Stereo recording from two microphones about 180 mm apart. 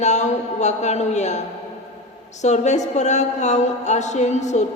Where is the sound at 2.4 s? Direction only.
40° left (ahead or behind).